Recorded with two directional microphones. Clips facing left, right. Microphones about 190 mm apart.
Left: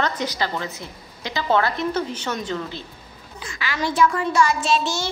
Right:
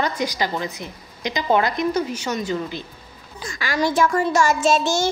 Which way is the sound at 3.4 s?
40° right (ahead or behind).